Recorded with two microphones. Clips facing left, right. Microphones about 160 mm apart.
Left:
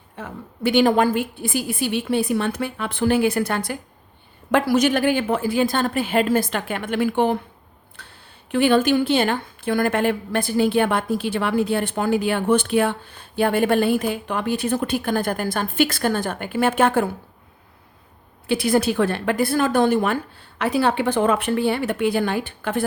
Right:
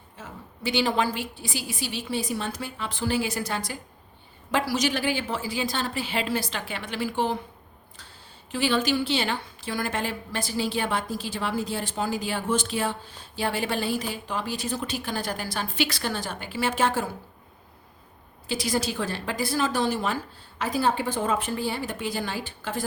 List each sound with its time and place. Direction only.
0.2 s a woman's voice: 55° left (ahead or behind)
18.4 s speech: 60° left (ahead or behind)